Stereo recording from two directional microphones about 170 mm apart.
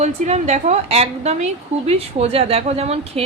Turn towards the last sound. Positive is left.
turn(degrees=-35)  # may be behind; listen again after turning